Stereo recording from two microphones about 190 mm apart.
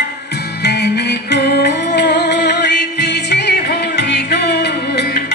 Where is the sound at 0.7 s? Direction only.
60° left (ahead or behind).